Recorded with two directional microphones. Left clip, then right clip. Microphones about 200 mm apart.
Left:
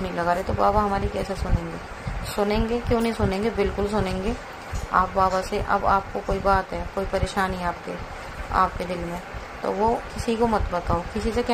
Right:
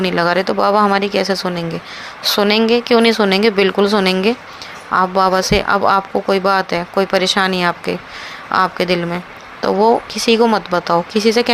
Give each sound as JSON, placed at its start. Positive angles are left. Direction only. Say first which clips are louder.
{"t": 0.0, "sound": "speech", "louder": "right 9 dB", "side_deg": -55}